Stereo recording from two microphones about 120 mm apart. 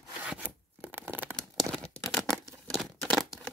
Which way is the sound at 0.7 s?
15° right (ahead or behind).